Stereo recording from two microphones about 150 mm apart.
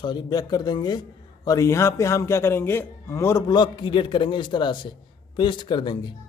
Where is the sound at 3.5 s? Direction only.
30° left (ahead or behind).